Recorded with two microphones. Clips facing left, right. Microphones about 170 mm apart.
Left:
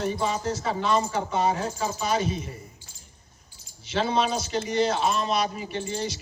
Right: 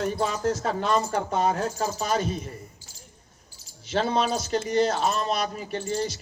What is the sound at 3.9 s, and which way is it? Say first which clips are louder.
Speech: even; 45° right (ahead or behind).